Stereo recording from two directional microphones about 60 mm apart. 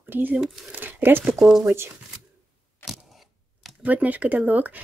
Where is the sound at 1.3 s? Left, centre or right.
Centre.